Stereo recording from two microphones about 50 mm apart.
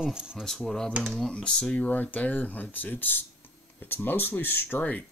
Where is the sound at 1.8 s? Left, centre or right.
Left.